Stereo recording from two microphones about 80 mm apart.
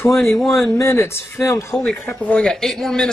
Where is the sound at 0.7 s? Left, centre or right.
Left.